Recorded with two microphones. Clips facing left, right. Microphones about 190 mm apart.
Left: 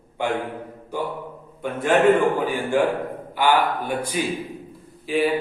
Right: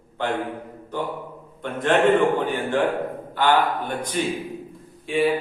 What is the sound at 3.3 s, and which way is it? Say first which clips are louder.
A man's voice: even; 10° left (ahead or behind).